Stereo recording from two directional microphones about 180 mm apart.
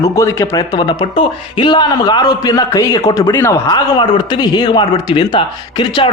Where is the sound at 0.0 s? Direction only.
15° left (ahead or behind).